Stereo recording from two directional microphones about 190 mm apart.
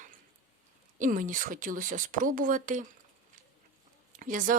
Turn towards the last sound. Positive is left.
turn(degrees=-45)  # may be behind; listen again after turning